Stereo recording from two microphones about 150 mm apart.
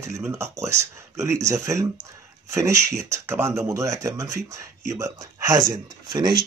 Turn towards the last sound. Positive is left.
turn(degrees=-30)  # may be behind; listen again after turning